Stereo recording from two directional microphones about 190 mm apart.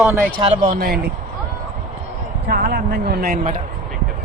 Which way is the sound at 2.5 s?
50° right (ahead or behind).